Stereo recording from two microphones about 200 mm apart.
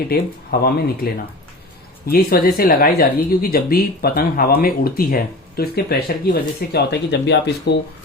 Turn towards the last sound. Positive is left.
turn(degrees=60)  # may be behind; listen again after turning